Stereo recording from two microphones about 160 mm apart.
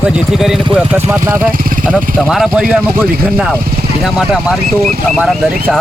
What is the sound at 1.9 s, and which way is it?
Speech, centre (ahead or behind).